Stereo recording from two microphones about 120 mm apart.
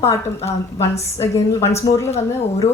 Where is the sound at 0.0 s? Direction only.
20° left (ahead or behind).